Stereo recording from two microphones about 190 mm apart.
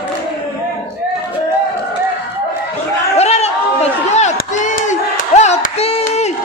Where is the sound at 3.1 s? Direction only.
35° left (ahead or behind).